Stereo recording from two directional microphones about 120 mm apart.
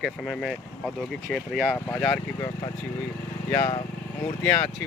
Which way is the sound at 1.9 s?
15° left (ahead or behind).